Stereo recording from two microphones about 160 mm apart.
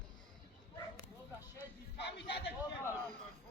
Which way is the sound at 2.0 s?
90° left.